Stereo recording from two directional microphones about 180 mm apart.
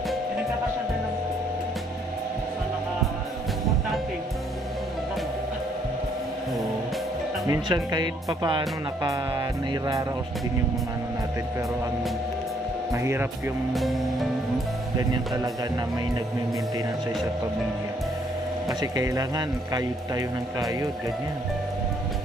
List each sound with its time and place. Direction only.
7.4 s speech: 20° right (ahead or behind)
12.9 s speech: 15° right (ahead or behind)
13.7 s speech: centre (ahead or behind)
18.7 s speech: 20° right (ahead or behind)